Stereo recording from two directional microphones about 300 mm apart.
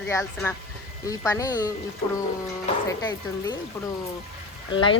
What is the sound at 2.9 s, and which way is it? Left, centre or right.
Speech, centre.